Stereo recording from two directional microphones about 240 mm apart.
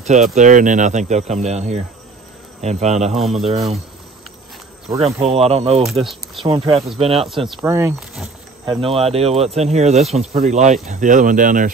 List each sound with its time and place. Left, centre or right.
0.0 s speech: right
3.1 s speech: centre
5.2 s speech: right
5.9 s speech: centre
6.4 s speech: right
7.6 s speech: centre
8.6 s speech: right